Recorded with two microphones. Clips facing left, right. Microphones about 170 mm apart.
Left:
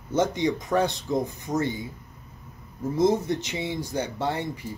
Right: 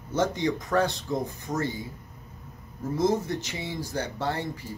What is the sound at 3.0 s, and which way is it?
Speech, 20° left (ahead or behind).